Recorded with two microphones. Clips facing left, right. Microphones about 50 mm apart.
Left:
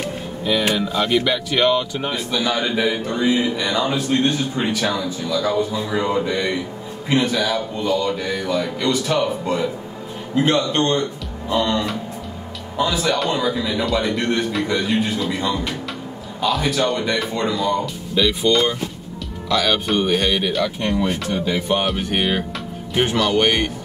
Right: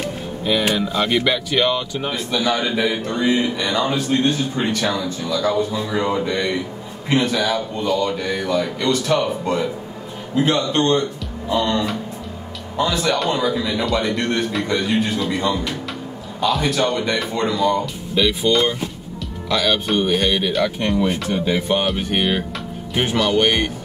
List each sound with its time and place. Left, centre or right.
0.5 s a man's voice: centre
10.4 s a man's voice: left
11.5 s a man's voice: centre